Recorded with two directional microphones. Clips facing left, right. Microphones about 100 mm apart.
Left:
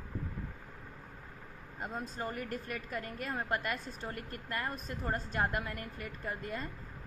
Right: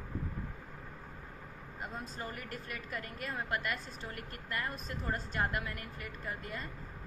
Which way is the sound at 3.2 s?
30° left (ahead or behind).